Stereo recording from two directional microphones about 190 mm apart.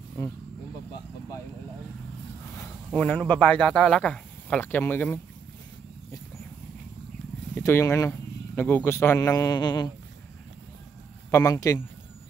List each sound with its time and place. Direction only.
2.5 s speech: 10° left (ahead or behind)
7.5 s a man's voice: 15° left (ahead or behind)
11.2 s a man's voice: 15° left (ahead or behind)